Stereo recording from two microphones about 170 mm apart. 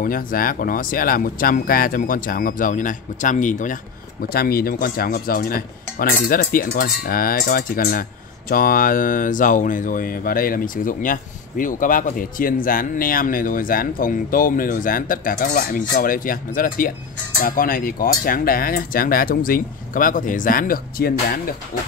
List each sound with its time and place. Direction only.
0.0 s speech: 55° left (ahead or behind)
4.3 s speech: 65° left (ahead or behind)